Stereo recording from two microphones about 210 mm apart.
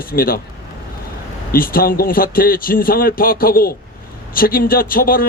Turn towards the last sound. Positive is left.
turn(degrees=45)  # may be behind; listen again after turning